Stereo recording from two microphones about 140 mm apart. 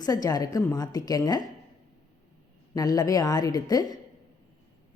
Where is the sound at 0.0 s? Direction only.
25° left (ahead or behind).